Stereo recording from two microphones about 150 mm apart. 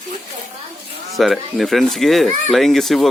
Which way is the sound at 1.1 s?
Centre (ahead or behind).